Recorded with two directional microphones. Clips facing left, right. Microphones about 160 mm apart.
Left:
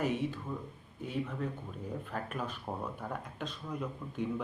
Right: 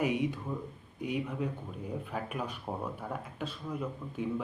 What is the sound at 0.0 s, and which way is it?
Speech, 15° right (ahead or behind).